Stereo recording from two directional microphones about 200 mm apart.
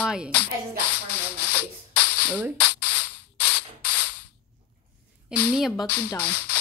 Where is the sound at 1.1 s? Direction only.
10° left (ahead or behind).